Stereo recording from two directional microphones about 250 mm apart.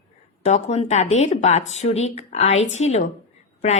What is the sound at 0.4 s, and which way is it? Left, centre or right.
A woman's voice, left.